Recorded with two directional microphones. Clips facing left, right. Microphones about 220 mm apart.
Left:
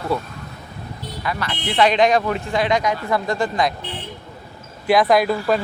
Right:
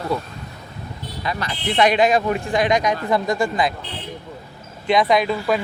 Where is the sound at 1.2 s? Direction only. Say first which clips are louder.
Even; 20° right (ahead or behind); by 2.4 s 5° right (ahead or behind).